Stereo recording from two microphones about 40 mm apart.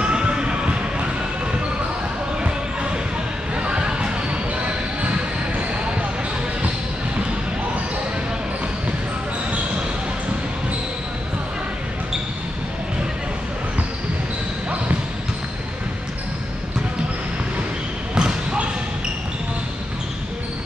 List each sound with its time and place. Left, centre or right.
0.0 s music: right
2.4 s basketball bounce: right
18.1 s basketball bounce: centre